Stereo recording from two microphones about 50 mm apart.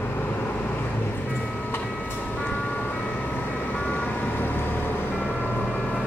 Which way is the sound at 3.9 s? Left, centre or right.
Left.